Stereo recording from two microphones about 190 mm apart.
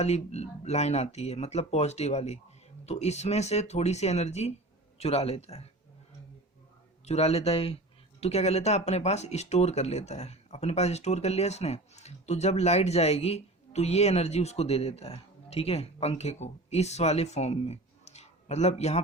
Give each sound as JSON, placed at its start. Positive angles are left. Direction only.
{"t": 0.0, "sound": "speech", "side_deg": 35}
{"t": 7.0, "sound": "speech", "side_deg": 35}